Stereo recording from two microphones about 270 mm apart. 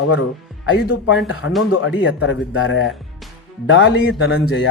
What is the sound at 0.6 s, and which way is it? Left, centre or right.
Speech, left.